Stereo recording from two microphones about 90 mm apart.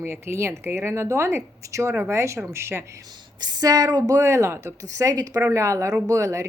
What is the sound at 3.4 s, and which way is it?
Speech, 45° right (ahead or behind).